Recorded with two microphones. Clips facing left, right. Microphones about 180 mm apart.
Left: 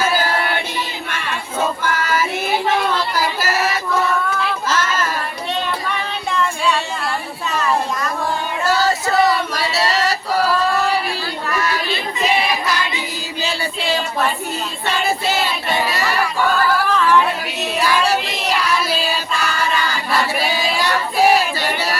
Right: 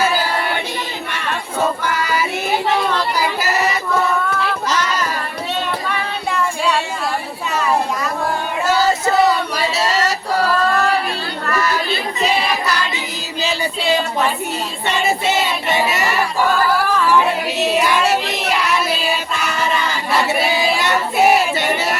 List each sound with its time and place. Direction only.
1.8 s music: 15° right (ahead or behind)
3.2 s a sound: 15° right (ahead or behind)
16.9 s singing: 10° right (ahead or behind)
17.7 s child singing: 20° right (ahead or behind)